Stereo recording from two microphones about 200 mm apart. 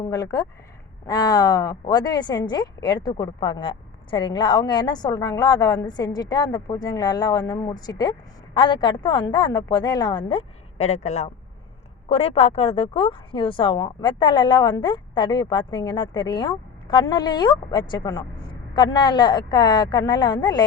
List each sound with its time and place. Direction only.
0.1 s a woman's voice: 20° left (ahead or behind)